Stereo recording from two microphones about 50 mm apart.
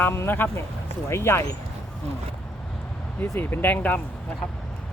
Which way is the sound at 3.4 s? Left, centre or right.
Left.